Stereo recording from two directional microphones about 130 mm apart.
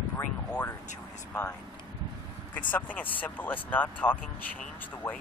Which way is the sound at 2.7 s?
10° left (ahead or behind).